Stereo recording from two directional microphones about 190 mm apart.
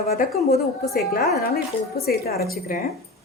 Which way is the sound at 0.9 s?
50° left (ahead or behind).